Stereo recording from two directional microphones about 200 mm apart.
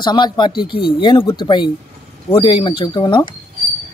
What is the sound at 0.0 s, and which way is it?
Speech, 20° left (ahead or behind).